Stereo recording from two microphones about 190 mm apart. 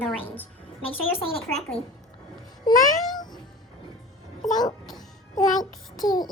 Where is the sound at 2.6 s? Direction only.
20° left (ahead or behind).